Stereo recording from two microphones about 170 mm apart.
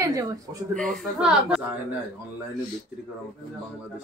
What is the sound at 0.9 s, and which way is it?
Speech, centre (ahead or behind).